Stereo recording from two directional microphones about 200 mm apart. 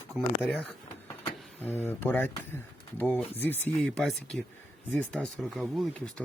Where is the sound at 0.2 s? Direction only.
5° left (ahead or behind).